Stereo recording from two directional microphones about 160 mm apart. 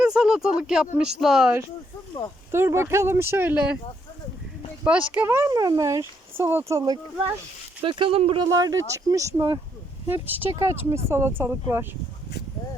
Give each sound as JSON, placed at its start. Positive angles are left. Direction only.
{"t": 0.0, "sound": "a sound", "side_deg": -5}
{"t": 0.9, "sound": "speech", "side_deg": -5}
{"t": 2.5, "sound": "speech", "side_deg": -15}
{"t": 4.8, "sound": "speech", "side_deg": -10}
{"t": 8.4, "sound": "speech", "side_deg": -20}